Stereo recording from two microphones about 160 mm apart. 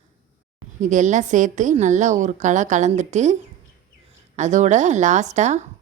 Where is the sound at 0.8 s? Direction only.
50° right (ahead or behind).